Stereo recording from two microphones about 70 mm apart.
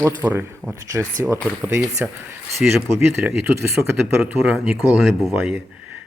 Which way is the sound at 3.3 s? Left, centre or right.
Right.